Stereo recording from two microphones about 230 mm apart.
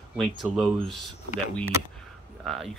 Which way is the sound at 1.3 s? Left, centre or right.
Right.